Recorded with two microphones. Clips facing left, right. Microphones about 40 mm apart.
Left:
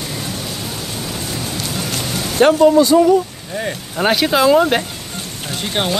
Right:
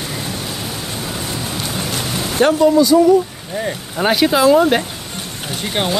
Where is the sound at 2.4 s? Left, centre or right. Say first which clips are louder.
Left 2 dB; left.